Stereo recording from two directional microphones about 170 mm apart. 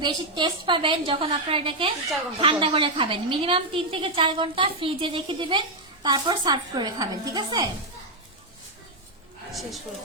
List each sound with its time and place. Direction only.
0.0 s a woman's voice: 25° right (ahead or behind)
9.5 s speech: centre (ahead or behind)